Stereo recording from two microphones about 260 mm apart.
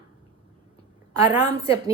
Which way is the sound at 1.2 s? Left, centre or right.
Centre.